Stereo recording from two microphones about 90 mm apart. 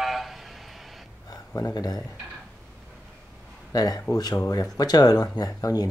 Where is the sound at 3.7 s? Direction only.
45° left (ahead or behind).